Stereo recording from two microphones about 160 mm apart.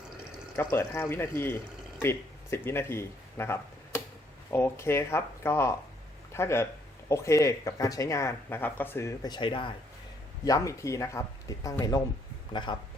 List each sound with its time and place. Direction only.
0.5 s speech: 15° left (ahead or behind); by 9.7 s 30° left (ahead or behind)
10.4 s speech: 20° left (ahead or behind)